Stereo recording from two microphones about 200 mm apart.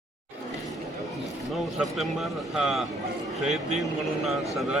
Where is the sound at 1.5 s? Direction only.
Centre (ahead or behind).